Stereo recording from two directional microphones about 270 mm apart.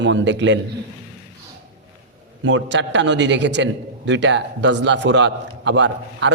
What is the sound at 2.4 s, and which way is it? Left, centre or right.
A man's voice, right.